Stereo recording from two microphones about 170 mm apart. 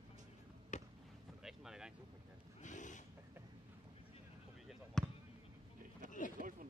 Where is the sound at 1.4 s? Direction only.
5° right (ahead or behind).